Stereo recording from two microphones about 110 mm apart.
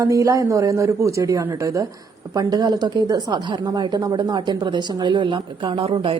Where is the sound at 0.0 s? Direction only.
30° right (ahead or behind).